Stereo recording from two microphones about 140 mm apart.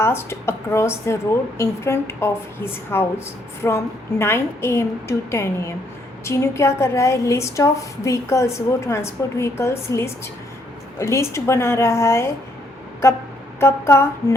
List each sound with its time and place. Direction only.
0.0 s a woman's voice: 20° left (ahead or behind)
13.6 s a woman's voice: 20° left (ahead or behind)